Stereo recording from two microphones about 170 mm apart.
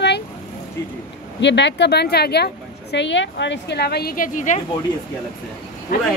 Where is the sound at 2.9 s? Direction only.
90° left; by 4.6 s 45° left (ahead or behind).